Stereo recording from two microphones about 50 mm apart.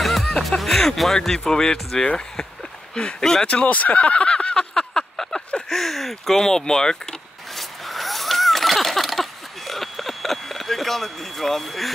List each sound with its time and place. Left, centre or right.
0.0 s speech: centre
3.4 s a sound: left; by 5.4 s centre
5.7 s speech: centre
7.8 s wheeze: centre